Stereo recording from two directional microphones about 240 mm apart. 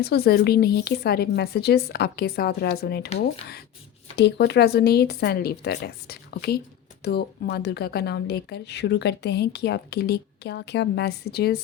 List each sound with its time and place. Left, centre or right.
0.0 s speech: left
4.2 s a woman's voice: left